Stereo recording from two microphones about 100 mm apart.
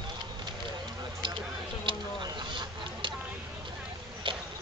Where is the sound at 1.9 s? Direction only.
55° right (ahead or behind).